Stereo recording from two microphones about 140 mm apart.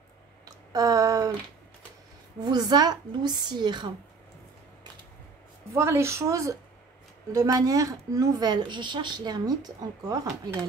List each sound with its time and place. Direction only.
0.5 s a sound: 25° right (ahead or behind)
2.4 s a woman's voice: 30° right (ahead or behind)
5.8 s speech: 20° right (ahead or behind)